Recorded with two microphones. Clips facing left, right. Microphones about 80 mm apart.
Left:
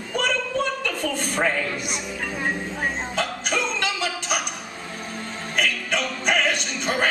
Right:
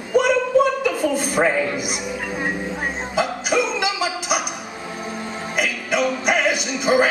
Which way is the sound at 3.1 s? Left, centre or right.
Centre.